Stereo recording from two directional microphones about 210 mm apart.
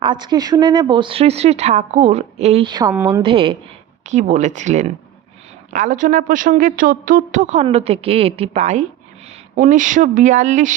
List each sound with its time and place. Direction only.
0.0 s a woman's voice: 20° right (ahead or behind)
3.2 s speech: 25° right (ahead or behind)